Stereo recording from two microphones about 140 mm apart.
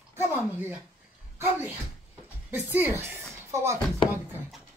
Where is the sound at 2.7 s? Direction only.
15° right (ahead or behind).